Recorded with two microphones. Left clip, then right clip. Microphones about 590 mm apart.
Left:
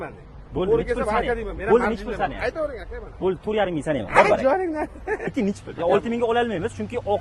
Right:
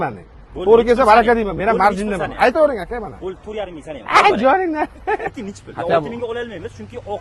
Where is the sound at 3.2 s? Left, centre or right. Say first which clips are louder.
Left 4 dB; left.